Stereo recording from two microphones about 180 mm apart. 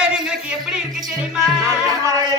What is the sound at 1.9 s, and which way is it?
Speech, 20° right (ahead or behind).